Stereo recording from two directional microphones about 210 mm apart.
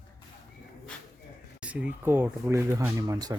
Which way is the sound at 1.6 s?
5° right (ahead or behind).